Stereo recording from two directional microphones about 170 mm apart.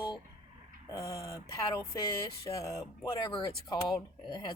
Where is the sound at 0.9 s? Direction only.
20° left (ahead or behind).